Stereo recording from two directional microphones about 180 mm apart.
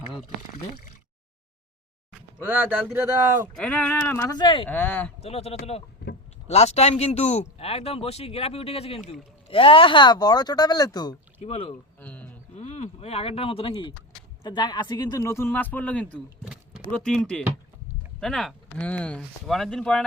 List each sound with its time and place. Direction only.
2.1 s speech: 10° right (ahead or behind)
3.5 s a man's voice: 5° left (ahead or behind)
4.4 s speech: 25° left (ahead or behind)
4.7 s a man's voice: 10° left (ahead or behind)
5.2 s speech: 35° left (ahead or behind)
6.0 s a sound: 65° left (ahead or behind)
6.5 s speech: 35° left (ahead or behind)
11.3 s speech: 35° left (ahead or behind)
11.9 s a sound: 10° left (ahead or behind)
12.5 s a man's voice: 40° left (ahead or behind); by 16.2 s 5° left (ahead or behind)
16.4 s a sound: 5° right (ahead or behind)
16.9 s speech: 5° left (ahead or behind)
18.2 s speech: 5° left (ahead or behind)